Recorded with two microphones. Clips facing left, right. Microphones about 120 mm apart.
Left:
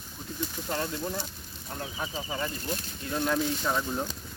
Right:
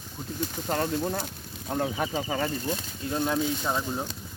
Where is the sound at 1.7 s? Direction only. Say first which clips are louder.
Right 8 dB; 70° right (ahead or behind).